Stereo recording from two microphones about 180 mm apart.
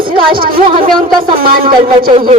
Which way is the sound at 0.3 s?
55° right (ahead or behind).